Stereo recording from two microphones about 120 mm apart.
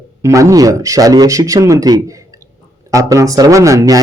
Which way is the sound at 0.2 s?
25° right (ahead or behind).